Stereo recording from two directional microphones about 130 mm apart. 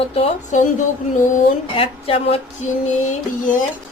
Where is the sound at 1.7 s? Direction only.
45° left (ahead or behind).